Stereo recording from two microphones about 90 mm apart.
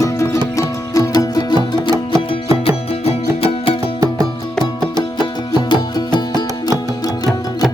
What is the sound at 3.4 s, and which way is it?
Music, 90° left.